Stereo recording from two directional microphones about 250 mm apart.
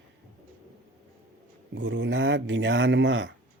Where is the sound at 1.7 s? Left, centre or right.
Right.